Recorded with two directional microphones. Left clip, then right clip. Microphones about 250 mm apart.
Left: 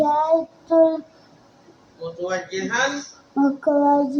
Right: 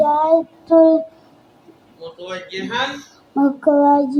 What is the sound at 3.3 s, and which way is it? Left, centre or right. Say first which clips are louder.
Child singing: right 4 dB; right.